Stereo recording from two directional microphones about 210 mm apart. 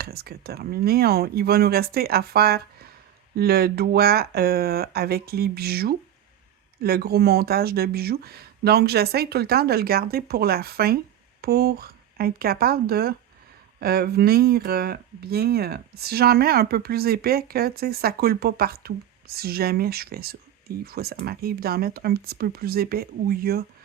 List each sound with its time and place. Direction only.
0.0 s speech: 45° right (ahead or behind)